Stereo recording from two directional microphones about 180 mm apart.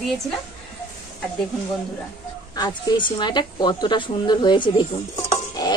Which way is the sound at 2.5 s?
25° left (ahead or behind).